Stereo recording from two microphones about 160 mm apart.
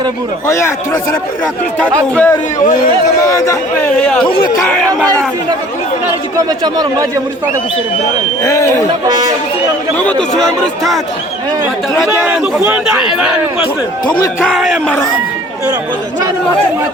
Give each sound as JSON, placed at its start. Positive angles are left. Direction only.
{"t": 0.4, "sound": "a man's voice", "side_deg": 15}
{"t": 1.9, "sound": "a man's voice", "side_deg": 10}
{"t": 3.2, "sound": "speech", "side_deg": 20}
{"t": 6.3, "sound": "a man's voice", "side_deg": -25}
{"t": 9.0, "sound": "a man's voice", "side_deg": -25}
{"t": 10.0, "sound": "a man's voice", "side_deg": 5}
{"t": 12.0, "sound": "a man's voice", "side_deg": -10}
{"t": 14.4, "sound": "speech", "side_deg": 0}